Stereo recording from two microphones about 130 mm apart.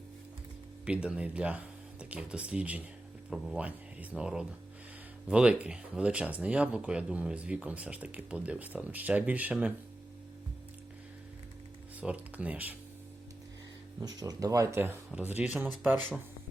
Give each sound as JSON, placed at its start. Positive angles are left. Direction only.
{"t": 0.9, "sound": "speech", "side_deg": -10}
{"t": 11.9, "sound": "speech", "side_deg": -10}
{"t": 14.0, "sound": "speech", "side_deg": -30}